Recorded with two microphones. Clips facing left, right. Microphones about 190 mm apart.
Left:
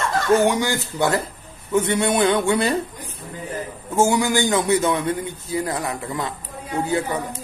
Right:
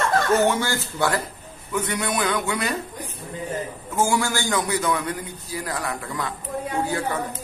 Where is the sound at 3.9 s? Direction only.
20° left (ahead or behind).